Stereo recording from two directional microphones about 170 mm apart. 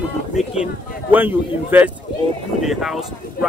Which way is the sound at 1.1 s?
10° right (ahead or behind).